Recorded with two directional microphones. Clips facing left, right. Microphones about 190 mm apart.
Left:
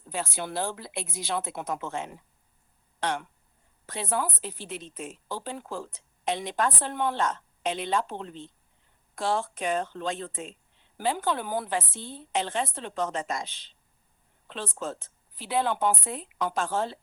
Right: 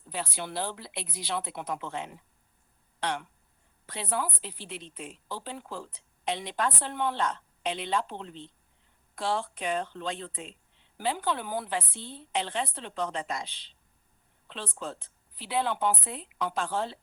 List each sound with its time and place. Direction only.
0.1 s speech: 45° left (ahead or behind)